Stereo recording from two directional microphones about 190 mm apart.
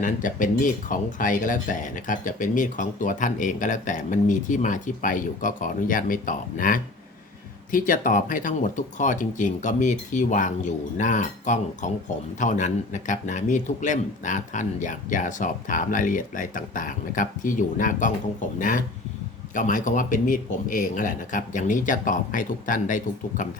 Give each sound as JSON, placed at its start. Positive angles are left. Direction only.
{"t": 0.0, "sound": "a man's voice", "side_deg": 45}
{"t": 19.5, "sound": "speech", "side_deg": 45}